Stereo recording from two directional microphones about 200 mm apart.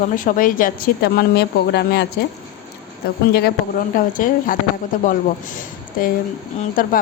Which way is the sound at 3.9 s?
45° left (ahead or behind).